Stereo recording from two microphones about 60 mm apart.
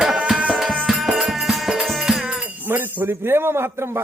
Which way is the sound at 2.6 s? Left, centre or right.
Right.